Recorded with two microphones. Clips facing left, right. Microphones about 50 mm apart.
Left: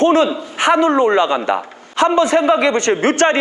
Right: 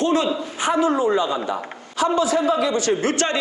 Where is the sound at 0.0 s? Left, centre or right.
Left.